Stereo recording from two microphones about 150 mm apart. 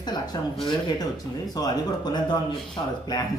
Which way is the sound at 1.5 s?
25° left (ahead or behind).